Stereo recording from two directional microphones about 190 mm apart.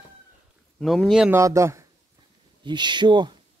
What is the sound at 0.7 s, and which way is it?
Speech, centre (ahead or behind).